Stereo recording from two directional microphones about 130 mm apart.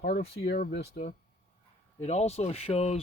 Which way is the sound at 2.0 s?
55° left (ahead or behind).